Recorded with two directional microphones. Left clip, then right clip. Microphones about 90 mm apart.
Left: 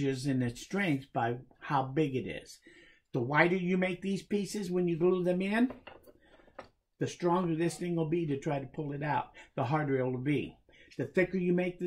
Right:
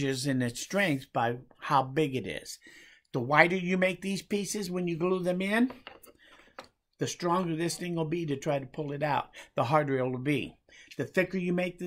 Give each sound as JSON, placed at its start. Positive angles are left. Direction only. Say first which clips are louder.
{"t": 0.0, "sound": "speech", "louder": "right 2 dB", "side_deg": -15}